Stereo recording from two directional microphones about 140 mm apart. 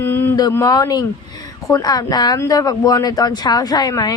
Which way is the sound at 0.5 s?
25° left (ahead or behind).